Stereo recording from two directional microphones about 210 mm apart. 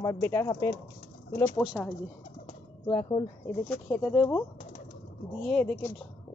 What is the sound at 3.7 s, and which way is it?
Speech, 5° left (ahead or behind).